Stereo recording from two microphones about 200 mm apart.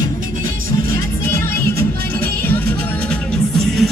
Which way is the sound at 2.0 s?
50° right (ahead or behind).